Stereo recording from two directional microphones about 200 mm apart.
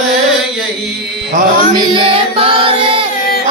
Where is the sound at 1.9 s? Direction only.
25° right (ahead or behind).